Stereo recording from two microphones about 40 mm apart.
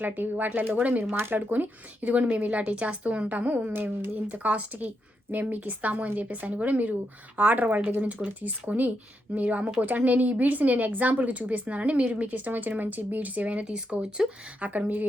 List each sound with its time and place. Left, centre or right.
0.0 s speech: right
1.0 s speech: right
1.4 s a woman's voice: right
3.7 s speech: right
4.3 s a woman's voice: right
13.9 s speech: right
14.6 s speech: right